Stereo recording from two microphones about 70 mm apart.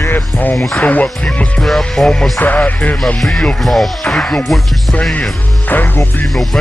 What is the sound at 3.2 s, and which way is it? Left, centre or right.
Music, centre.